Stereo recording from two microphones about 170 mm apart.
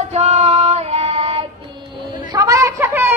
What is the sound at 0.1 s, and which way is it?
Child singing, 40° right (ahead or behind).